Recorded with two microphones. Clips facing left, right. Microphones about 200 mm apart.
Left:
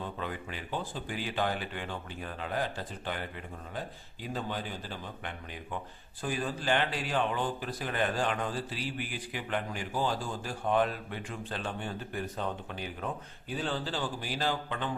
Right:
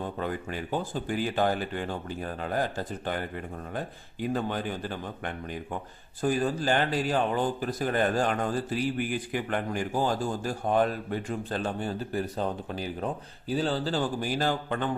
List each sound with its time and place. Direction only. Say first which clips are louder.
0.0 s speech: right 5 dB; 45° right (ahead or behind)
3.8 s speech: right 6 dB; 55° right (ahead or behind)
6.2 s speech: right 6 dB; 45° right (ahead or behind)